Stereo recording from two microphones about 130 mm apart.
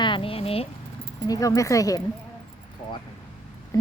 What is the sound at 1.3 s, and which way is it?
Speech, 25° left (ahead or behind).